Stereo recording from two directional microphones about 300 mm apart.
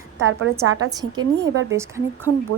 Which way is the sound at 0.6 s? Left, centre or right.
Right.